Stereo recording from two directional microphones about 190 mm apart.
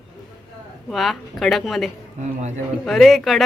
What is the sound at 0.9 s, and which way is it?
Speech, centre (ahead or behind).